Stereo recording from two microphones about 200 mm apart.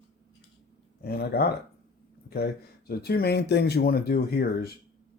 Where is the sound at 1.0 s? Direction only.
50° left (ahead or behind).